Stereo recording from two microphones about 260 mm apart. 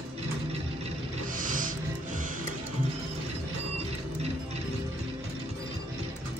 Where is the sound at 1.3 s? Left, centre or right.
Right.